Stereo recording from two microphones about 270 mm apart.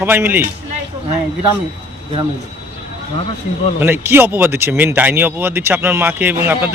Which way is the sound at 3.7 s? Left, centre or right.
Centre.